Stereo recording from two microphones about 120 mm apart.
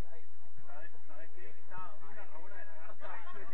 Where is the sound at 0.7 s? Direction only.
35° left (ahead or behind).